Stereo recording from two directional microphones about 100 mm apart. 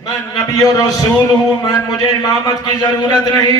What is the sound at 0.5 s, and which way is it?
A man's voice, 35° left (ahead or behind).